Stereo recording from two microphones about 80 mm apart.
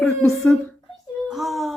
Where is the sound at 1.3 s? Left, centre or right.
Centre.